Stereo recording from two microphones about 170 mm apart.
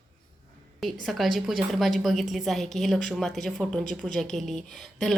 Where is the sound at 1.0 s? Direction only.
Centre (ahead or behind).